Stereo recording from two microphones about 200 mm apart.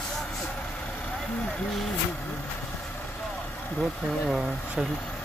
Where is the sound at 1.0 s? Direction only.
5° left (ahead or behind).